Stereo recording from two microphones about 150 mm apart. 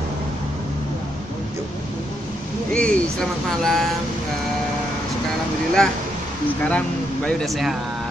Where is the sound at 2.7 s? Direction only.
10° left (ahead or behind).